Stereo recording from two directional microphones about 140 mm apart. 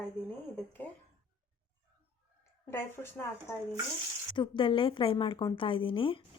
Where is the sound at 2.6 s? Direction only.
15° left (ahead or behind).